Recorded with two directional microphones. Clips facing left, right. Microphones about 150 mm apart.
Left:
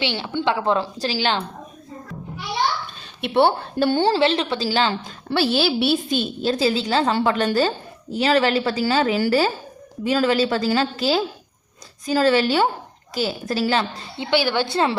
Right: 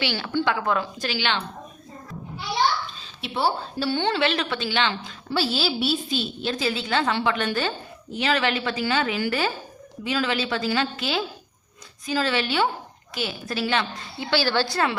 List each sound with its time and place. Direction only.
0.0 s a woman's voice: 25° left (ahead or behind)
3.0 s a woman's voice: 60° left (ahead or behind)
4.0 s a woman's voice: 30° left (ahead or behind)
5.3 s a woman's voice: 60° left (ahead or behind)
6.4 s a woman's voice: 35° left (ahead or behind)
14.2 s a woman's voice: 20° left (ahead or behind)
14.7 s a woman's voice: 25° left (ahead or behind)